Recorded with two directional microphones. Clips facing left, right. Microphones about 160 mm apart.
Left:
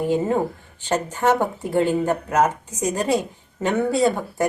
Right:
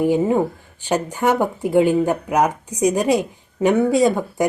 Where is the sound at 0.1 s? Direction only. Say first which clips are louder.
Right 3 dB; 10° right (ahead or behind).